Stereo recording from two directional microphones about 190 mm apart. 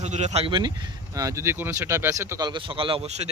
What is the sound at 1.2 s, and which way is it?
A man's voice, 15° right (ahead or behind).